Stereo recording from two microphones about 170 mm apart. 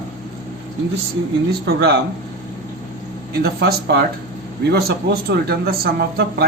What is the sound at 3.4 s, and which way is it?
Speech, 70° right (ahead or behind).